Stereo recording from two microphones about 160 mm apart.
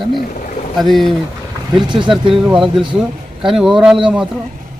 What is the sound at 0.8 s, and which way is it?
Speech, centre (ahead or behind).